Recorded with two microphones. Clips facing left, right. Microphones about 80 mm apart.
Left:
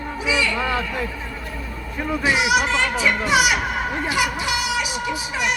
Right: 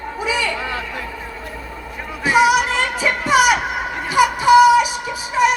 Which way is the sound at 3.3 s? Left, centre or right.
Right.